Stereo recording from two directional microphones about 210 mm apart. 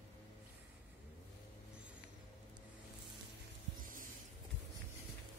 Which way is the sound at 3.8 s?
40° right (ahead or behind).